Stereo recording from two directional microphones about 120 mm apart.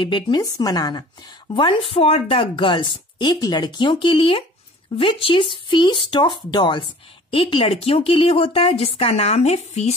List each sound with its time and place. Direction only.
0.0 s speech: 40° left (ahead or behind); by 9.9 s 65° left (ahead or behind)